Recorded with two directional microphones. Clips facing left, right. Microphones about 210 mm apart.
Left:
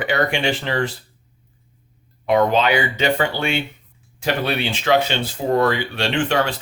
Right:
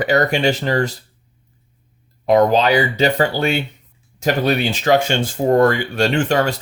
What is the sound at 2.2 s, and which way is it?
Speech, 40° right (ahead or behind).